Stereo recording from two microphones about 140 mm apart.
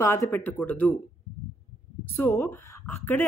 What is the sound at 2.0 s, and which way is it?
Speech, 15° left (ahead or behind).